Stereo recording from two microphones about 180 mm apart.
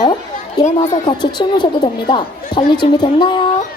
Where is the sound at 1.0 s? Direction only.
25° left (ahead or behind).